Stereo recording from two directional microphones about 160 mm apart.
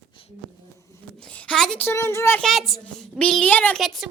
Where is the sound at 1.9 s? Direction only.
15° left (ahead or behind).